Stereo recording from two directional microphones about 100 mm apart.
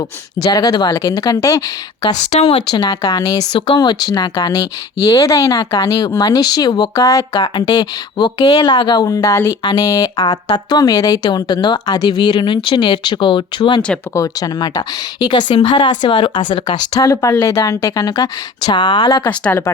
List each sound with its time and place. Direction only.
0.5 s a woman's voice: 45° left (ahead or behind)
2.3 s speech: 85° left
2.6 s a woman's voice: 45° left (ahead or behind)
5.2 s a woman's voice: 35° left (ahead or behind); by 9.0 s 50° left (ahead or behind)
9.0 s a woman's voice: 35° left (ahead or behind); by 13.8 s 50° left (ahead or behind)
14.1 s a woman's voice: 35° left (ahead or behind)
15.5 s speech: 85° left
15.8 s a woman's voice: 55° left (ahead or behind)